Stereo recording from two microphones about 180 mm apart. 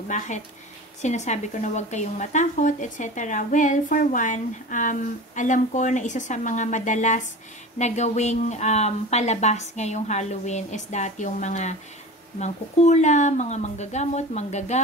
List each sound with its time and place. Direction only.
0.1 s a woman's voice: 40° left (ahead or behind)